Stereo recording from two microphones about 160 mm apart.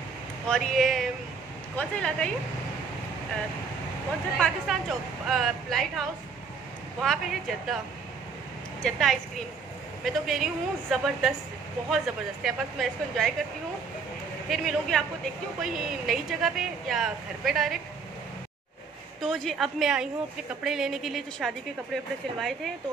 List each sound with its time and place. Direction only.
0.5 s a woman's voice: centre (ahead or behind)
4.4 s a woman's voice: centre (ahead or behind)
8.8 s a woman's voice: 5° left (ahead or behind)
12.4 s a woman's voice: centre (ahead or behind)
14.5 s a woman's voice: centre (ahead or behind)
19.2 s a woman's voice: centre (ahead or behind)